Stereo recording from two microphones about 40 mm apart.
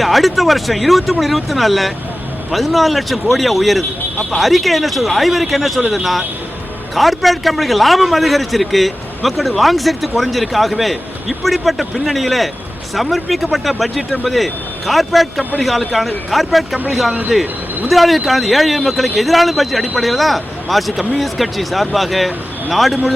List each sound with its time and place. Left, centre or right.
0.0 s a man's voice: centre